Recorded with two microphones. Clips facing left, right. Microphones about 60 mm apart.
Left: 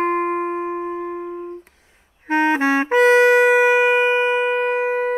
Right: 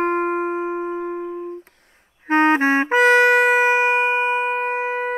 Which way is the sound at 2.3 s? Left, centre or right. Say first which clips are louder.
Right 1 dB; right.